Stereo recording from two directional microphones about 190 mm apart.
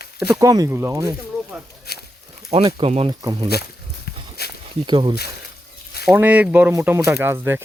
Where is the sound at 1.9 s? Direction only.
55° left (ahead or behind).